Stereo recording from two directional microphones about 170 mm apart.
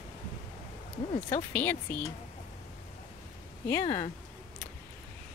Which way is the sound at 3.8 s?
30° left (ahead or behind).